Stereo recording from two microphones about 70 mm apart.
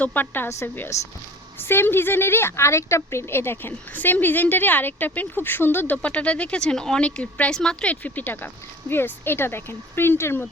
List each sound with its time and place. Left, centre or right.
0.0 s a woman's voice: left
1.5 s a woman's voice: left
6.0 s a woman's voice: centre; by 10.4 s left